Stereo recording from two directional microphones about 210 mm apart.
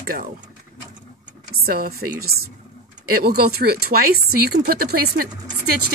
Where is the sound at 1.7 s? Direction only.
45° right (ahead or behind).